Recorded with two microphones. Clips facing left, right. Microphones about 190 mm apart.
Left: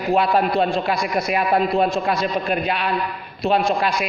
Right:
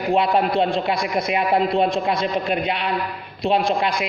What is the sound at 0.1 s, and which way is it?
A man's voice, 20° right (ahead or behind).